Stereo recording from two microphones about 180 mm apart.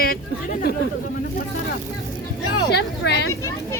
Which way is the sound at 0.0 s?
55° left (ahead or behind).